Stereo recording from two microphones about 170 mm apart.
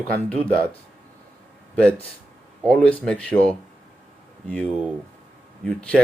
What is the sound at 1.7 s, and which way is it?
Speech, 5° left (ahead or behind).